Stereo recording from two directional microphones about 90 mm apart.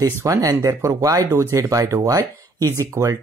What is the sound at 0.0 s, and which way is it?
Speech, 35° right (ahead or behind).